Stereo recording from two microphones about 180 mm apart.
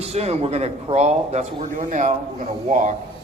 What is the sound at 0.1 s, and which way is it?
A man's voice, 35° right (ahead or behind).